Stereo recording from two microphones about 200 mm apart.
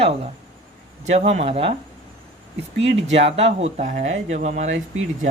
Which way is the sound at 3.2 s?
30° right (ahead or behind).